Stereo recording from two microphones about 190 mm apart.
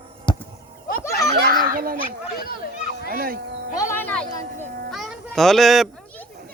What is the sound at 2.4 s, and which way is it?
Children playing, 50° left (ahead or behind).